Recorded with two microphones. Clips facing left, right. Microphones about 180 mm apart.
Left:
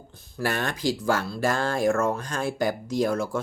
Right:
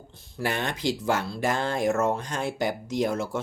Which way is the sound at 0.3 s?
20° right (ahead or behind).